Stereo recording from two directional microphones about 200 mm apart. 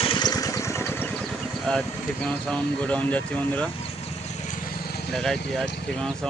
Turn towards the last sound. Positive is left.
turn(degrees=0)  # may be behind; listen again after turning